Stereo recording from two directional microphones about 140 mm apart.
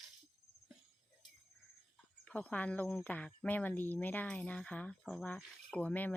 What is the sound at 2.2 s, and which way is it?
Speech, 10° left (ahead or behind).